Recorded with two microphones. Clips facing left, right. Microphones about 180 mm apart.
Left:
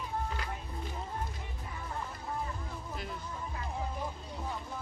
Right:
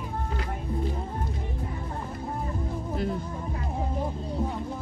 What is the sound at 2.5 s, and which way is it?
Music, 35° right (ahead or behind).